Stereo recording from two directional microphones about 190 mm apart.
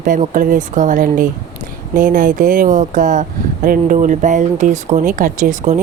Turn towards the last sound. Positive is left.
turn(degrees=-40)  # may be behind; listen again after turning